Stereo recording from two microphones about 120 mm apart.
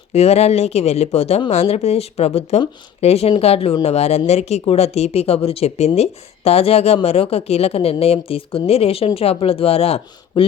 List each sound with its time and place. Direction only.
0.1 s speech: 60° left (ahead or behind)